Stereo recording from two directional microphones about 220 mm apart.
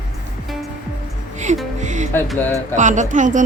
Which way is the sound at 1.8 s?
35° right (ahead or behind).